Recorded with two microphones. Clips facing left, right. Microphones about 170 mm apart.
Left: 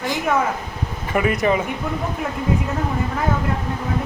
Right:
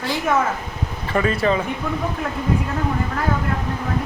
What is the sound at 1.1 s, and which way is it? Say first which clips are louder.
Speech: left 1 dB; 15° left (ahead or behind).